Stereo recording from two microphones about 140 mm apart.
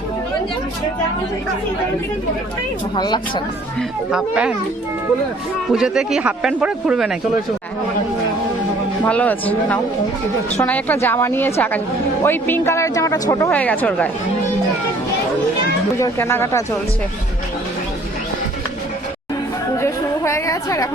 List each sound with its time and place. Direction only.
2.9 s speech: 35° left (ahead or behind)
3.8 s speech: 5° right (ahead or behind)
5.6 s speech: 5° right (ahead or behind)
9.0 s a woman's voice: 10° left (ahead or behind)
13.5 s a woman's voice: 10° left (ahead or behind)
16.0 s a woman's voice: 20° left (ahead or behind)
19.7 s a sound: 20° left (ahead or behind)